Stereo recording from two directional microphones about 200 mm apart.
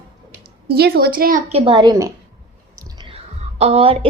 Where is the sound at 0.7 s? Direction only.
50° right (ahead or behind).